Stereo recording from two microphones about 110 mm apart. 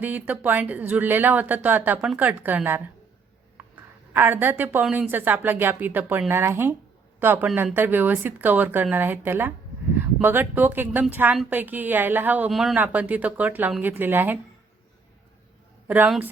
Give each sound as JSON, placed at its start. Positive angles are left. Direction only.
{"t": 0.0, "sound": "speech", "side_deg": -15}
{"t": 4.1, "sound": "speech", "side_deg": -20}
{"t": 12.5, "sound": "speech", "side_deg": 0}
{"t": 12.7, "sound": "a woman's voice", "side_deg": -15}